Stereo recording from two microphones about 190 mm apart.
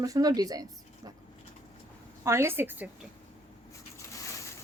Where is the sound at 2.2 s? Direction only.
15° right (ahead or behind).